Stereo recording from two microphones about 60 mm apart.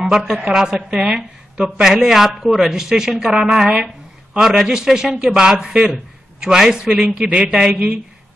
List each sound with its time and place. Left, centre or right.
0.1 s a woman's voice: centre